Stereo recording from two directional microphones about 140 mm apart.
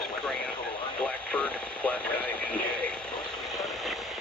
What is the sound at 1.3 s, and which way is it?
Radio, 10° left (ahead or behind).